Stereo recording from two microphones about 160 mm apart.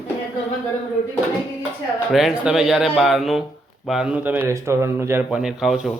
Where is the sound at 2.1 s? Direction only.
5° right (ahead or behind).